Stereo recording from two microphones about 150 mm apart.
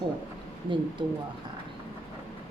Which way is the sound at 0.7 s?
30° right (ahead or behind).